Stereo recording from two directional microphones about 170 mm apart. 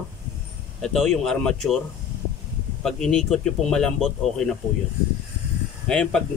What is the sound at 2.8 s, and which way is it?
Speech, 5° left (ahead or behind).